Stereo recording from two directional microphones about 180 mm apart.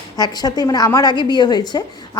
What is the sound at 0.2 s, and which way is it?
A woman's voice, 20° left (ahead or behind).